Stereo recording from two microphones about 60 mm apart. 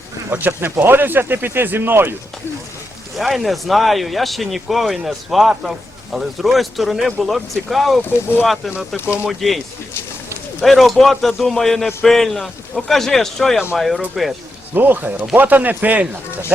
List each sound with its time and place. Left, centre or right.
0.3 s speech: right
3.2 s speech: centre
9.4 s speech: centre
10.6 s speech: centre
14.7 s a man's voice: right